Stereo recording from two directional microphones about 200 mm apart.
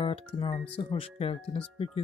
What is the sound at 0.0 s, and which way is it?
Speech, 30° left (ahead or behind).